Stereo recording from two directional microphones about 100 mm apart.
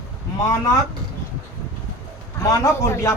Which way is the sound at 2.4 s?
30° left (ahead or behind).